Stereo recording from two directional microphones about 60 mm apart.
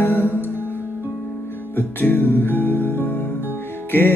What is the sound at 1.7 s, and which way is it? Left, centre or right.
Music, left.